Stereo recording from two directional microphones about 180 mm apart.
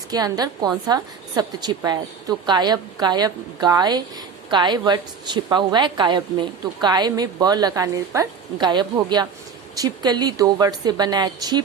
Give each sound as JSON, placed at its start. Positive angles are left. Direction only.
{"t": 0.1, "sound": "a woman's voice", "side_deg": -20}